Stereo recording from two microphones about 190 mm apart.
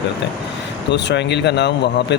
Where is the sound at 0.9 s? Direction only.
65° left (ahead or behind).